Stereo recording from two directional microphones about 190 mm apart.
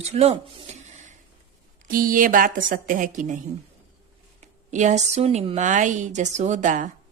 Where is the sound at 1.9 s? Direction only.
45° right (ahead or behind).